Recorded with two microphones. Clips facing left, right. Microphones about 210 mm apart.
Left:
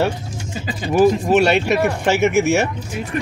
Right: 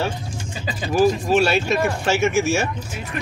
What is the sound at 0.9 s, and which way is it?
Speech, 65° left (ahead or behind).